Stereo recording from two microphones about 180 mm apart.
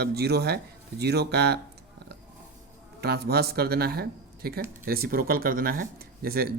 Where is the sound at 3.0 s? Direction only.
60° right (ahead or behind).